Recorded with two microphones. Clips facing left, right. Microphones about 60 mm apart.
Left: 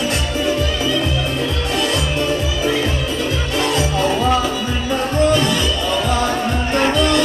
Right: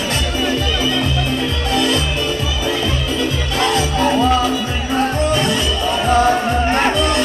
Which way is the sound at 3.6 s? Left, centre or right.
Right.